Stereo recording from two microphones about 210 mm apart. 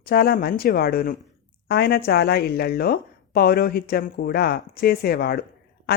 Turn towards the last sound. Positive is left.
turn(degrees=45)  # may be behind; listen again after turning